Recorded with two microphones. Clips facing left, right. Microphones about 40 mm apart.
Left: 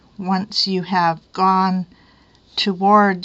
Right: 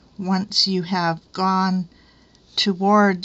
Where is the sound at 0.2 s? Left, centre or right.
Centre.